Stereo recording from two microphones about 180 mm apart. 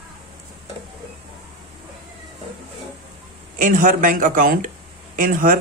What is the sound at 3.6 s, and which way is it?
Speech, 45° right (ahead or behind).